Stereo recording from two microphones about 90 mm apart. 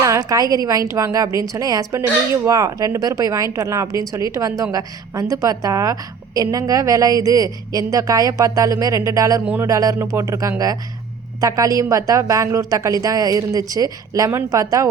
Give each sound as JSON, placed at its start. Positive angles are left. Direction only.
{"t": 0.0, "sound": "a woman's voice", "side_deg": -40}